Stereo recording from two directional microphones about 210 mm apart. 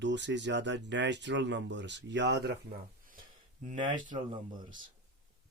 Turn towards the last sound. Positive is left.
turn(degrees=-20)  # may be behind; listen again after turning